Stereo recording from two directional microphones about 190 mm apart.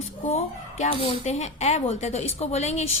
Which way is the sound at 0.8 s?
35° left (ahead or behind).